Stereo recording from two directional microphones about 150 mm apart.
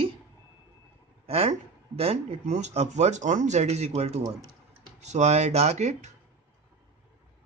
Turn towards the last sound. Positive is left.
turn(degrees=-50)  # may be behind; listen again after turning